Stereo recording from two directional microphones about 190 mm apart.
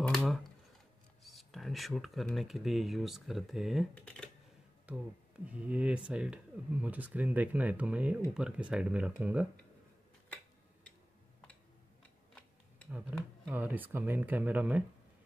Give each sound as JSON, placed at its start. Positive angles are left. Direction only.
{"t": 0.0, "sound": "a sound", "side_deg": 5}
{"t": 1.2, "sound": "speech", "side_deg": 0}
{"t": 4.9, "sound": "speech", "side_deg": -5}
{"t": 12.9, "sound": "speech", "side_deg": -10}